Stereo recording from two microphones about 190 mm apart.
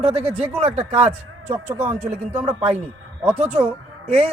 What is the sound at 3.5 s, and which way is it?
Speech, 35° right (ahead or behind).